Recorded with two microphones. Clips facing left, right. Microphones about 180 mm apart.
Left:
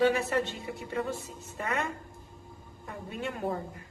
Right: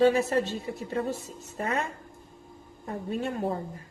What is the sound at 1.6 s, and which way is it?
Speech, 35° right (ahead or behind).